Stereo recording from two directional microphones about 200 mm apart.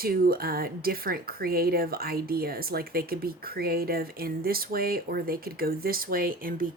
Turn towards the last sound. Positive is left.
turn(degrees=-45)  # may be behind; listen again after turning